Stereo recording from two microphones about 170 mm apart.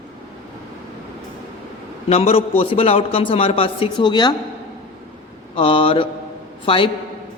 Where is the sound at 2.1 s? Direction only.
35° left (ahead or behind).